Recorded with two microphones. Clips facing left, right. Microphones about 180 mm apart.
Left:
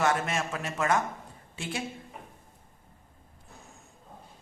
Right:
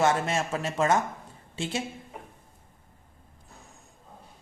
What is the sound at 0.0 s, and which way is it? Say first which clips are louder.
A man's voice: right 3 dB; 25° right (ahead or behind).